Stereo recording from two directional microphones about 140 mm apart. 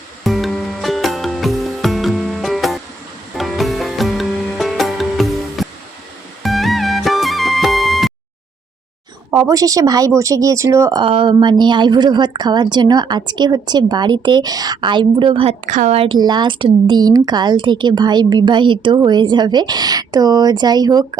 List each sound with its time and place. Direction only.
0.3 s music: centre (ahead or behind)
9.3 s speech: 25° right (ahead or behind)
11.0 s a woman's voice: 40° right (ahead or behind)
15.6 s a woman's voice: 65° right (ahead or behind)
16.0 s a woman's voice: 35° right (ahead or behind)